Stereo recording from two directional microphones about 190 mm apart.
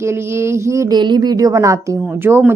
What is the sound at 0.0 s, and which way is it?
A woman's voice, 15° right (ahead or behind).